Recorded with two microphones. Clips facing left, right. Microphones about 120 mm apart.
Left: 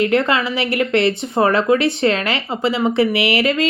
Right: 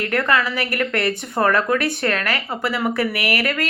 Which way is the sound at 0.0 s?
25° left (ahead or behind).